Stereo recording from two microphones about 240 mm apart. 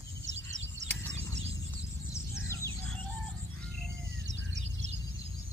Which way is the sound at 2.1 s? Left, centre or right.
Centre.